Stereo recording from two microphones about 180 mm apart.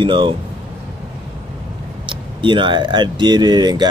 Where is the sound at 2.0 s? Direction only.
25° right (ahead or behind).